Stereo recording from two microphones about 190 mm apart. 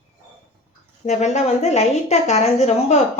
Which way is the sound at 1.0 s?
40° left (ahead or behind).